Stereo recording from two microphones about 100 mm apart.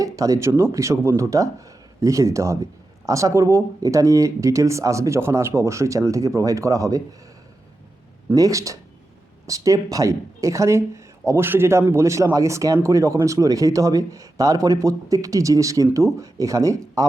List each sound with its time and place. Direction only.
0.0 s speech: 35° right (ahead or behind)
8.4 s speech: 35° right (ahead or behind)